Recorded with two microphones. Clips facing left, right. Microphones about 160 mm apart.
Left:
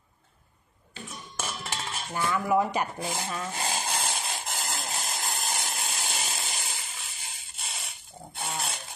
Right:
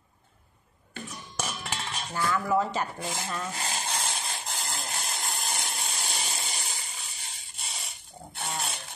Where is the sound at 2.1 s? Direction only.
20° left (ahead or behind).